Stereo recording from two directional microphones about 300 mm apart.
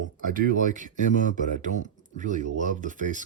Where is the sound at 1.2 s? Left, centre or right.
Right.